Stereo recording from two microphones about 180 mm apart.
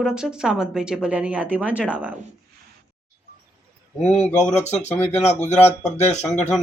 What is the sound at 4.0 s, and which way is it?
Speech, 35° left (ahead or behind).